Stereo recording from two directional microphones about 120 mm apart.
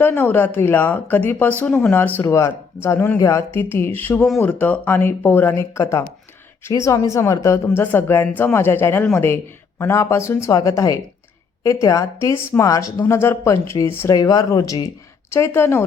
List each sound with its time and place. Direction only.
0.0 s speech: 20° left (ahead or behind)